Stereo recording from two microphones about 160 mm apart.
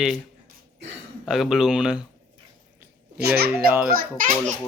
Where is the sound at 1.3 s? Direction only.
Centre (ahead or behind).